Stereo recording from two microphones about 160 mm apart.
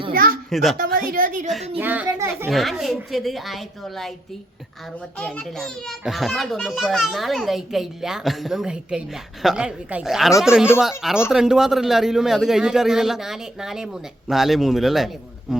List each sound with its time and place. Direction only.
0.1 s a sound: 65° right (ahead or behind)
0.5 s a child's voice: centre (ahead or behind)
0.8 s a woman's voice: 65° right (ahead or behind)
1.8 s speech: 10° right (ahead or behind)
2.5 s a child's voice: centre (ahead or behind)
5.1 s a child's voice: 5° left (ahead or behind)